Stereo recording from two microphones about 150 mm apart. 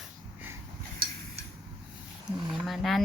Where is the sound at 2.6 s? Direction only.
Centre (ahead or behind).